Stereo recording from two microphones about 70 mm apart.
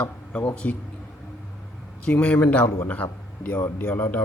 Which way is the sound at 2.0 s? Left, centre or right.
Centre.